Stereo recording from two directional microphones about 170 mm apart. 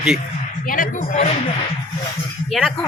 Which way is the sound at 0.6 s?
55° left (ahead or behind).